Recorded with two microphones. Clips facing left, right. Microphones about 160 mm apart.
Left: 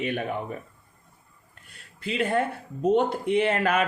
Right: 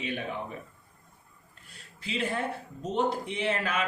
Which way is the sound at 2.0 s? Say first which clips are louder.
Left 6 dB; 55° left (ahead or behind).